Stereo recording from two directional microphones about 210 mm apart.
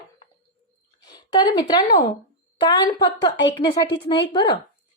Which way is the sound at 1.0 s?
20° left (ahead or behind).